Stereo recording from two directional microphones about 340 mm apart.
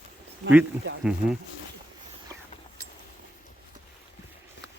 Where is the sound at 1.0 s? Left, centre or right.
Centre.